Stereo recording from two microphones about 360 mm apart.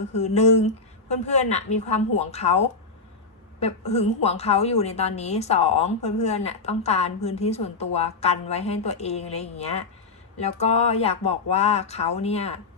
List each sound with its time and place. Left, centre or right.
0.1 s a woman's voice: centre